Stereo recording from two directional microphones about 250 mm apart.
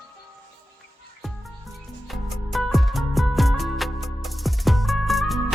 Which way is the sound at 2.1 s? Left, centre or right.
Centre.